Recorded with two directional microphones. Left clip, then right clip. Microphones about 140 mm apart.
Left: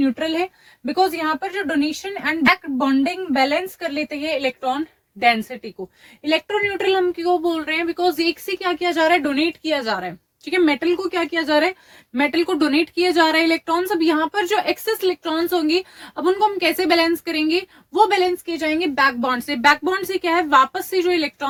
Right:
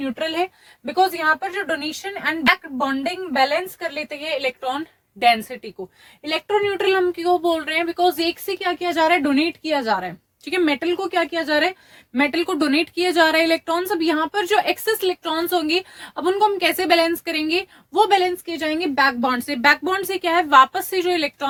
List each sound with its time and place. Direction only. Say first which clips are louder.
0.0 s speech: left 2 dB; 50° right (ahead or behind)
1.0 s a woman's voice: right 3 dB; 35° right (ahead or behind)
5.2 s speech: right 1 dB; 65° right (ahead or behind)
6.7 s speech: even; 60° right (ahead or behind); by 11.7 s 45° right (ahead or behind)
12.1 s a woman's voice: left 1 dB; 35° right (ahead or behind)